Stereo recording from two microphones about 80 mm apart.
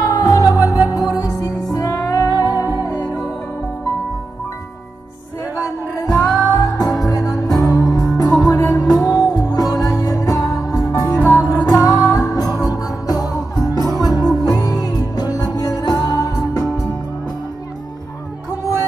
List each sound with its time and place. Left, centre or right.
0.0 s music: left
6.2 s music: left